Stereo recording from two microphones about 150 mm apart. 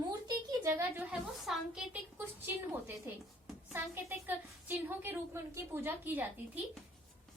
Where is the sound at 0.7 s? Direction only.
15° right (ahead or behind).